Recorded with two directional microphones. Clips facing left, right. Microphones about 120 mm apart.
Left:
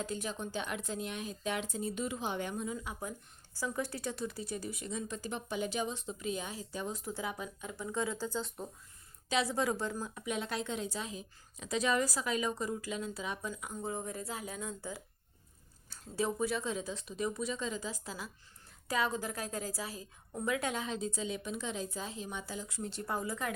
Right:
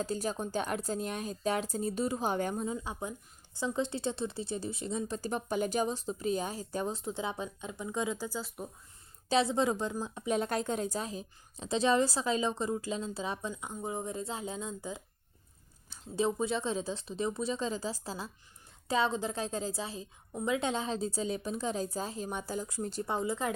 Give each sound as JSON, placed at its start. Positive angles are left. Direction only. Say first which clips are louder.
{"t": 0.0, "sound": "speech", "louder": "right 4 dB", "side_deg": -35}
{"t": 2.6, "sound": "speech", "louder": "right 3 dB", "side_deg": -30}
{"t": 6.9, "sound": "speech", "louder": "right 3 dB", "side_deg": -25}
{"t": 9.3, "sound": "speech", "louder": "right 4 dB", "side_deg": -25}
{"t": 10.2, "sound": "speech", "louder": "right 6 dB", "side_deg": -40}
{"t": 23.0, "sound": "speech", "louder": "right 3 dB", "side_deg": -25}